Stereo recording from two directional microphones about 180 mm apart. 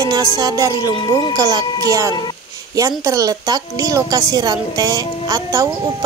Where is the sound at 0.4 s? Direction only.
20° right (ahead or behind).